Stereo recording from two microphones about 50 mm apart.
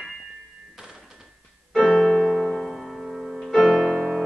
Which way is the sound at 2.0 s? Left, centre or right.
Centre.